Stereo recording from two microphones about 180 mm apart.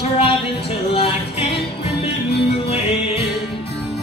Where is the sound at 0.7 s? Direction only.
30° left (ahead or behind).